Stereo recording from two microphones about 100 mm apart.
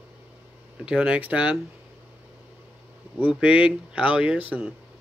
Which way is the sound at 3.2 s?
15° right (ahead or behind).